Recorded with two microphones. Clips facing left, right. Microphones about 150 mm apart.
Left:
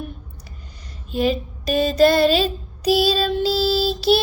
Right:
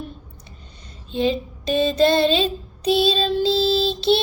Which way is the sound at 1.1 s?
25° right (ahead or behind).